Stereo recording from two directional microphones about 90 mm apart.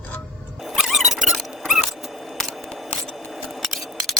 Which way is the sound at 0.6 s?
Centre (ahead or behind).